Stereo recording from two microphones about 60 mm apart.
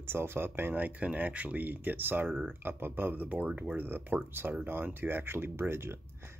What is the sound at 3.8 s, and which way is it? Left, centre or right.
Speech, right.